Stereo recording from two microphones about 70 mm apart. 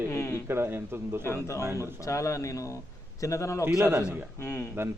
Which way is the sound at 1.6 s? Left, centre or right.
Right.